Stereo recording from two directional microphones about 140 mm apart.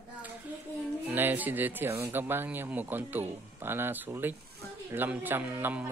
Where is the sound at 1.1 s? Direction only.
15° right (ahead or behind).